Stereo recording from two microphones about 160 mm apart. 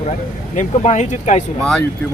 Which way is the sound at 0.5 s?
50° left (ahead or behind).